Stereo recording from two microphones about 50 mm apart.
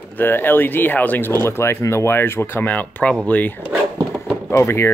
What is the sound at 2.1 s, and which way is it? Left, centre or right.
Speech, left.